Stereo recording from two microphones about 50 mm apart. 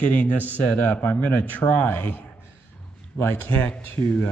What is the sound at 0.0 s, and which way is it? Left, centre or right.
Speech, left.